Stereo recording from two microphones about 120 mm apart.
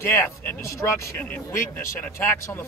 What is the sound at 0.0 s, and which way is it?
Speech, 20° left (ahead or behind).